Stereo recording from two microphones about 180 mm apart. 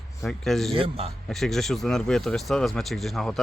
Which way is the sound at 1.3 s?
Centre (ahead or behind).